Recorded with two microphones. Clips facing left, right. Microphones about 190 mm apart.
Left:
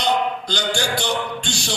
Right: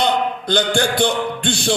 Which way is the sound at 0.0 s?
55° right (ahead or behind).